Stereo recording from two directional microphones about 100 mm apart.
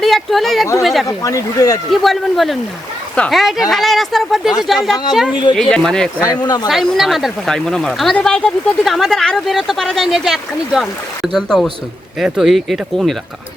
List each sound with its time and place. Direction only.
0.0 s a sound: centre (ahead or behind)
0.8 s speech: centre (ahead or behind)
1.0 s speech: 35° left (ahead or behind)
1.9 s speech: centre (ahead or behind)
5.5 s speech: 5° left (ahead or behind)
6.2 s speech: 40° left (ahead or behind)
6.7 s speech: centre (ahead or behind)